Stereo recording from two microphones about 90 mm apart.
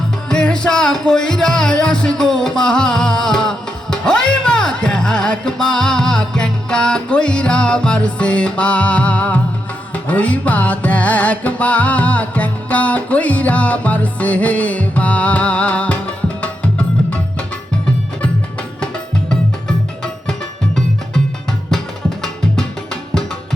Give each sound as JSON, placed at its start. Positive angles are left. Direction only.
{"t": 0.3, "sound": "music", "side_deg": 10}